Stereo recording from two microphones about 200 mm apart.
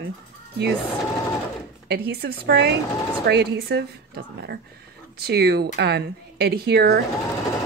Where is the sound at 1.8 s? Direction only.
55° right (ahead or behind).